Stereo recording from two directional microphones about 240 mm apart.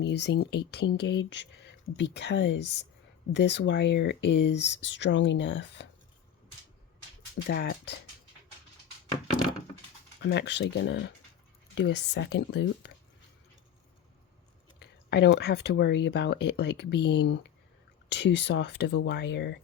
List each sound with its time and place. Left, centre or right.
0.0 s speech: left
7.4 s speech: left
10.2 s speech: left
14.8 s speech: left